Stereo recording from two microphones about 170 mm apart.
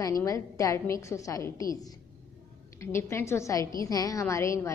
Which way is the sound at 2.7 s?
15° left (ahead or behind).